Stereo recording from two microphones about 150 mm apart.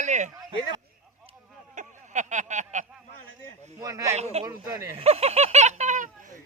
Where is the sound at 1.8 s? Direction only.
55° right (ahead or behind).